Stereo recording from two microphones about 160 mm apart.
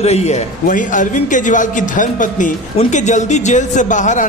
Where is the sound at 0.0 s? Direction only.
40° left (ahead or behind).